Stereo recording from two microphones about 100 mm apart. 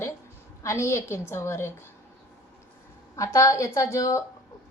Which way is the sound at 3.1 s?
30° left (ahead or behind).